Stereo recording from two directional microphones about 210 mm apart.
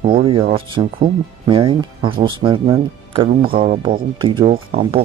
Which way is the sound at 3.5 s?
45° right (ahead or behind).